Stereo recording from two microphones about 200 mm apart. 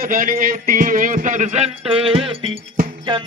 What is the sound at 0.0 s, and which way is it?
Music, 45° right (ahead or behind).